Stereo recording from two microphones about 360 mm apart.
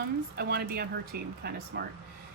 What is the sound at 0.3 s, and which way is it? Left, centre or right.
Speech, right.